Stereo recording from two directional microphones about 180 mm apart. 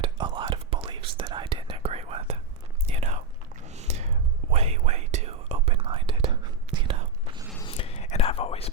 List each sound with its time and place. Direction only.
0.0 s whispering: 25° right (ahead or behind)
7.6 s whispering: 30° left (ahead or behind)